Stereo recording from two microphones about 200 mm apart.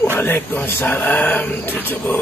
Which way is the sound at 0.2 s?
10° left (ahead or behind).